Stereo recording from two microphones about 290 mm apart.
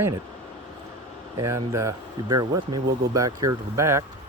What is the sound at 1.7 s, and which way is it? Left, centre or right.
Speech, centre.